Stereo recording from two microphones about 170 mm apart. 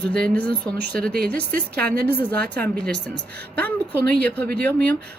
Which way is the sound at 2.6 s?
5° left (ahead or behind).